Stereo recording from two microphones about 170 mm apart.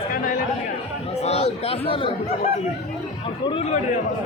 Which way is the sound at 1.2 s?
35° left (ahead or behind).